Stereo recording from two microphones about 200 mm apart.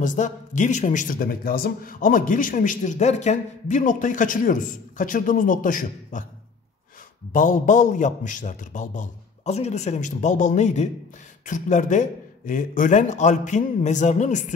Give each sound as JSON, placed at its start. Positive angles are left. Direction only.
{"t": 0.0, "sound": "a man's voice", "side_deg": 40}
{"t": 7.3, "sound": "a man's voice", "side_deg": 40}